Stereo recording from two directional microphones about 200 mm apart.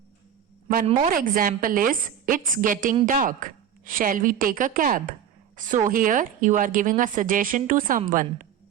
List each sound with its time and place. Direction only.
1.1 s a woman's voice: 45° right (ahead or behind)